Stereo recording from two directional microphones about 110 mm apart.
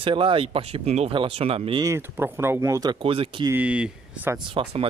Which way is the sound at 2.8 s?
50° right (ahead or behind).